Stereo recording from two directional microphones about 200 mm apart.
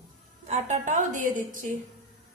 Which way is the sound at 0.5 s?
35° right (ahead or behind).